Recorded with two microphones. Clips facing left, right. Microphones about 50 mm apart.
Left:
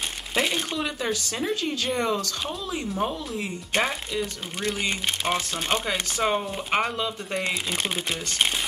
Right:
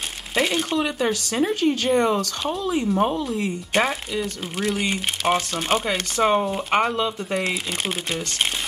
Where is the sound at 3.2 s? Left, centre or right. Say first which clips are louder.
Right 6 dB; centre.